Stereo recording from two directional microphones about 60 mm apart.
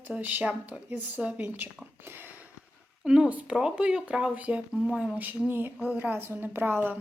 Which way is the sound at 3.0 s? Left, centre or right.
Centre.